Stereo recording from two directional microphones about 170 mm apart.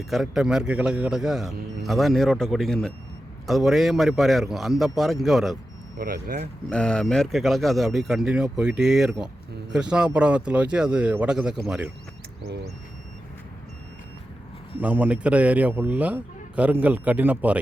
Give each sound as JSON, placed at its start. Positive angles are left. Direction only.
{"t": 0.0, "sound": "a man's voice", "side_deg": 0}
{"t": 6.0, "sound": "speech", "side_deg": -55}
{"t": 6.7, "sound": "a man's voice", "side_deg": 5}
{"t": 14.8, "sound": "a man's voice", "side_deg": -10}